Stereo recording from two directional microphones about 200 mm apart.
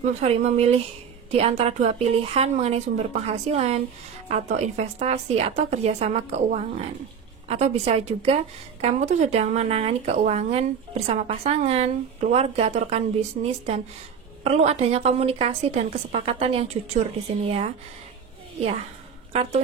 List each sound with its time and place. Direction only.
0.0 s speech: 35° right (ahead or behind)
18.6 s speech: 35° right (ahead or behind)